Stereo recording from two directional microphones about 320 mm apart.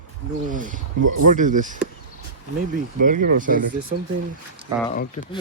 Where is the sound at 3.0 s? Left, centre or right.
Right.